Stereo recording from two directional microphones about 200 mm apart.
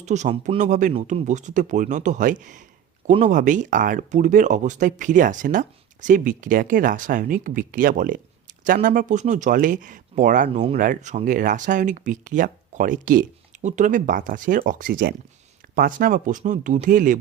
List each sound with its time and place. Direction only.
0.0 s speech: 35° right (ahead or behind)